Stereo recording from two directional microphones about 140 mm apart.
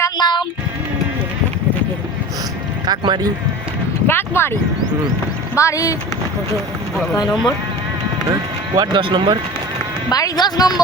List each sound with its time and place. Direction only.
0.0 s music: 30° left (ahead or behind)
2.8 s speech: 30° right (ahead or behind)
4.0 s speech: 15° left (ahead or behind)
5.5 s speech: 25° left (ahead or behind)
8.3 s speech: 30° right (ahead or behind)
10.1 s speech: 25° left (ahead or behind)